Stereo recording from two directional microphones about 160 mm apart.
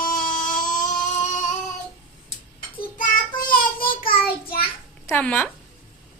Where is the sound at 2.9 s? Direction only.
60° left (ahead or behind).